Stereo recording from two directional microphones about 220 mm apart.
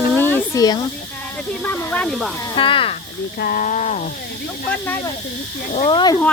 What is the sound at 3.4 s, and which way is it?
Speech, 40° left (ahead or behind).